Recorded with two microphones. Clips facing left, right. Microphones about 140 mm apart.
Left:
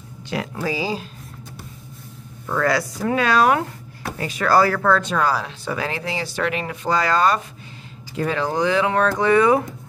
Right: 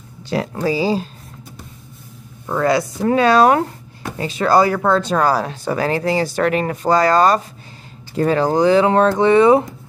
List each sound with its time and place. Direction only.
0.3 s speech: 35° right (ahead or behind)
2.4 s speech: 20° right (ahead or behind)
5.1 s speech: 45° right (ahead or behind); by 9.7 s 25° right (ahead or behind)